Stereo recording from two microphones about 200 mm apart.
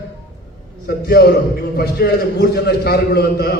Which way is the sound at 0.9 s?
50° left (ahead or behind).